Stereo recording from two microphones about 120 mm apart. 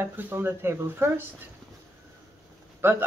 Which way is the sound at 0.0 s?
20° right (ahead or behind).